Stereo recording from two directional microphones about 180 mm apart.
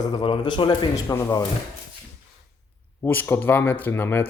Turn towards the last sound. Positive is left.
turn(degrees=10)  # may be behind; listen again after turning